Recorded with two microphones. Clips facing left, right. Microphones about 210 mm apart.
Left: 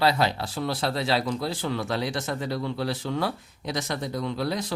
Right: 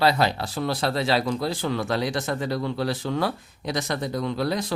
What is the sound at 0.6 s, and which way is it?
Speech, 90° right.